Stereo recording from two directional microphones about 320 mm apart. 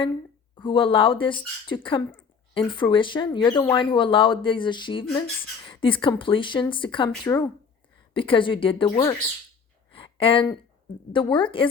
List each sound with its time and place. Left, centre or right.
0.5 s speech: centre
9.9 s a sound: centre
11.1 s speech: centre